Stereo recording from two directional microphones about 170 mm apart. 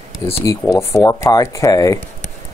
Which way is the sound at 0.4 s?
20° left (ahead or behind).